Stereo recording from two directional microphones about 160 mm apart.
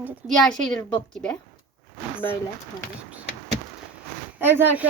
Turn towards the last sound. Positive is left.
turn(degrees=-10)  # may be behind; listen again after turning